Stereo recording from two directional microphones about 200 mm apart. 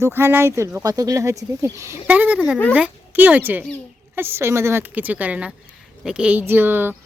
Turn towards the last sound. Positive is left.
turn(degrees=-10)  # may be behind; listen again after turning